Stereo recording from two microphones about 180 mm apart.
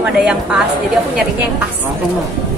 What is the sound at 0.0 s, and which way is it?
Speech, 5° right (ahead or behind).